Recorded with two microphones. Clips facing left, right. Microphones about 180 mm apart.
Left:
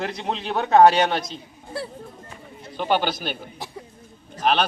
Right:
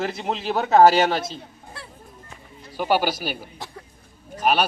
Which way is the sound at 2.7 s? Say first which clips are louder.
Right 1 dB; 10° right (ahead or behind).